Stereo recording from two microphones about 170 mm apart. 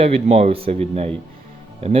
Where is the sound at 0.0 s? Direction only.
35° right (ahead or behind).